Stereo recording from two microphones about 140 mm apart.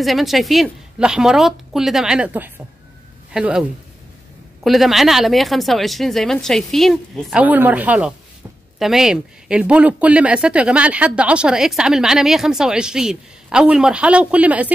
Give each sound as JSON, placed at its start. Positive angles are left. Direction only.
{"t": 0.0, "sound": "speech", "side_deg": 0}
{"t": 4.6, "sound": "speech", "side_deg": 0}
{"t": 7.4, "sound": "speech", "side_deg": -10}